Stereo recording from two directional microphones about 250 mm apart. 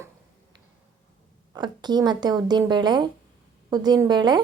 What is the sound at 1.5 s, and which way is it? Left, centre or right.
A woman's voice, centre.